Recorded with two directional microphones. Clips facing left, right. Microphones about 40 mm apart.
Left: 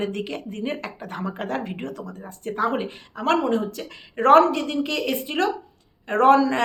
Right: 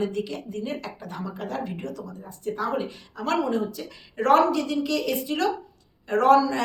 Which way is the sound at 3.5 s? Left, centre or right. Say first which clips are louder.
Left 3 dB; left.